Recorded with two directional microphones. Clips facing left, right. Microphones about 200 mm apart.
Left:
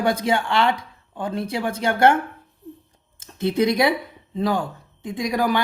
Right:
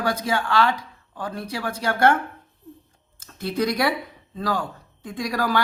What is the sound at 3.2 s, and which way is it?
Speech, 25° left (ahead or behind).